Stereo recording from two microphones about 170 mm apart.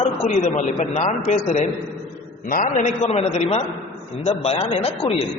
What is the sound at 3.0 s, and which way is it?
A man's voice, 35° left (ahead or behind).